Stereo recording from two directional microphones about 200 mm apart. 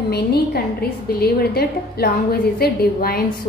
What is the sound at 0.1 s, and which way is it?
A woman's voice, 55° left (ahead or behind).